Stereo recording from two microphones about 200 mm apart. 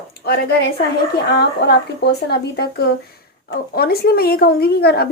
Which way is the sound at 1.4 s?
55° left (ahead or behind).